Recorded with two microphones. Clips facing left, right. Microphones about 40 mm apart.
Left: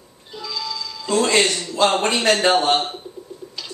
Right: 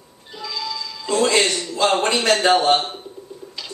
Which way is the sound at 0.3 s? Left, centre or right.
Centre.